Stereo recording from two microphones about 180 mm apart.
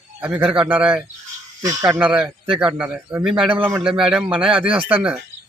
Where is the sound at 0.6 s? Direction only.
30° right (ahead or behind).